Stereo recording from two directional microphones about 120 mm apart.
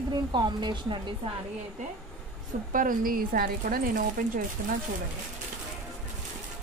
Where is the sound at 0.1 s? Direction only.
40° right (ahead or behind).